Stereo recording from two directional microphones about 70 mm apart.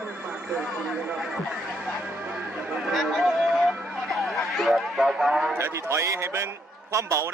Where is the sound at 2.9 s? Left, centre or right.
Centre.